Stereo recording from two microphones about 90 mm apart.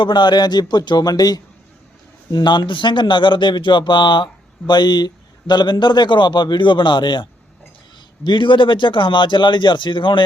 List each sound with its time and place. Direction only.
0.0 s speech: 55° left (ahead or behind)